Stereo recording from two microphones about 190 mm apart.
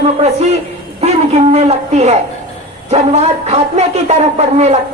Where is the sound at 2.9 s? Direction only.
35° right (ahead or behind).